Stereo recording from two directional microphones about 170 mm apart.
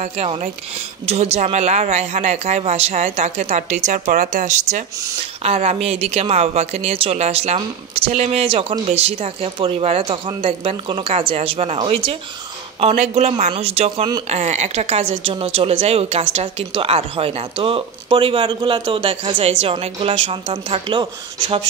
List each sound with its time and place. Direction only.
0.0 s speech: 45° right (ahead or behind); by 21.6 s 25° right (ahead or behind)